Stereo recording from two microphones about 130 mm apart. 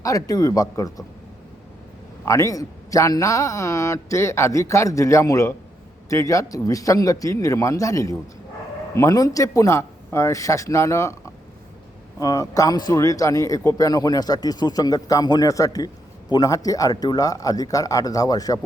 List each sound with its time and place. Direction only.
0.0 s a man's voice: 25° left (ahead or behind)
2.2 s a man's voice: 25° left (ahead or behind)
12.2 s a man's voice: 25° left (ahead or behind)